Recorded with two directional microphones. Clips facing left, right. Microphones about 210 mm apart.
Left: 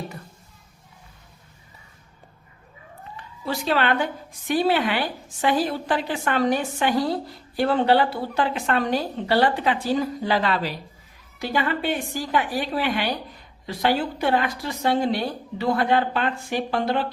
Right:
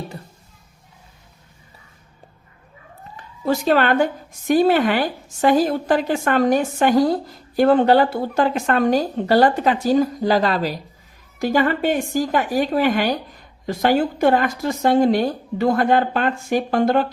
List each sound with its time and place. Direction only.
3.4 s a woman's voice: 45° right (ahead or behind)